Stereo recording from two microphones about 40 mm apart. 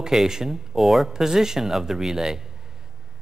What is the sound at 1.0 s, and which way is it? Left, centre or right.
Speech, centre.